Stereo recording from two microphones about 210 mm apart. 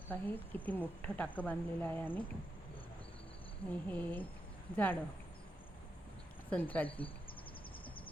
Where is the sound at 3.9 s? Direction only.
10° left (ahead or behind).